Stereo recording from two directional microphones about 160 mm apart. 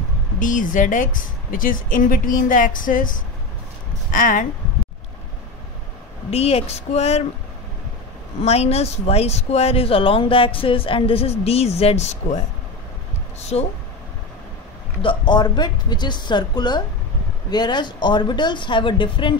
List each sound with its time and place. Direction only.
0.4 s a woman's voice: 55° left (ahead or behind)
4.1 s a woman's voice: 55° left (ahead or behind)
6.3 s speech: 40° left (ahead or behind)
8.4 s speech: 40° left (ahead or behind)
13.4 s speech: 40° left (ahead or behind)
15.0 s speech: 30° left (ahead or behind)